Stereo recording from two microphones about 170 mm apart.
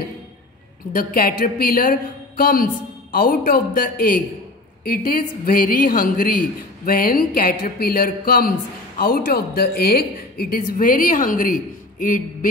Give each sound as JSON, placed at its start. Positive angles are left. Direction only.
{"t": 0.9, "sound": "speech", "side_deg": 55}